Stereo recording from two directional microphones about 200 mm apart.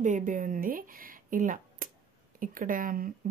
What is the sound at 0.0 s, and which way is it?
Speech, 40° right (ahead or behind).